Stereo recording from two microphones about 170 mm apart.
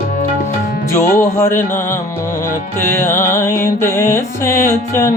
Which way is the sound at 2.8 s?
15° left (ahead or behind).